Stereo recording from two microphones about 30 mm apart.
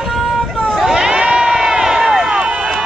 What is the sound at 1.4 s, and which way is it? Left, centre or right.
Crowd, right.